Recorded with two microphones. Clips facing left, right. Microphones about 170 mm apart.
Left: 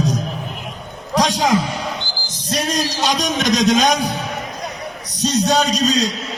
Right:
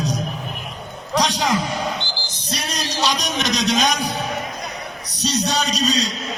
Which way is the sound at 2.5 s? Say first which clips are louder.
Left 6 dB; 45° left (ahead or behind).